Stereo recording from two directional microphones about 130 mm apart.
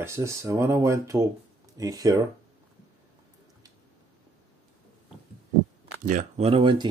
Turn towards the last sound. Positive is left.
turn(degrees=-40)  # may be behind; listen again after turning